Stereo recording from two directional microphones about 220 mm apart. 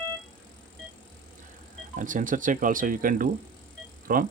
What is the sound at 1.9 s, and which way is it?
Speech, 35° right (ahead or behind).